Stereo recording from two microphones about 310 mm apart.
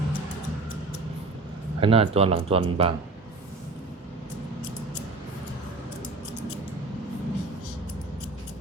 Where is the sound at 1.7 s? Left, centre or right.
Centre.